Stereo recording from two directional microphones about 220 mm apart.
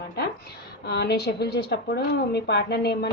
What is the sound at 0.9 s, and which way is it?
A woman's voice, 50° left (ahead or behind).